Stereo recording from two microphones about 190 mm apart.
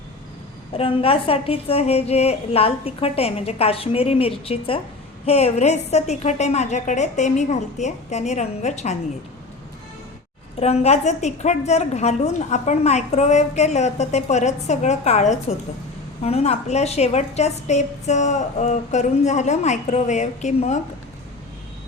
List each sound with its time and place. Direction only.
0.8 s a woman's voice: 30° left (ahead or behind)
10.6 s a woman's voice: 35° left (ahead or behind)